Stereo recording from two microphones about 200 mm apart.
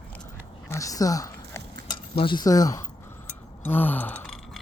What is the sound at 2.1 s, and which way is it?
Speech, 25° left (ahead or behind).